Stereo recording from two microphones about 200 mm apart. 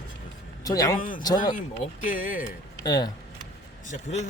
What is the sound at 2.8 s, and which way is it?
Speech, 20° left (ahead or behind).